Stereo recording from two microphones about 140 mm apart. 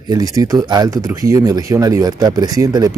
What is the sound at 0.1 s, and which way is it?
Speech, 25° right (ahead or behind).